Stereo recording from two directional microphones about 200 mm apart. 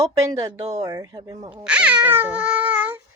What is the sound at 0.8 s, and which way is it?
Speech, 20° right (ahead or behind).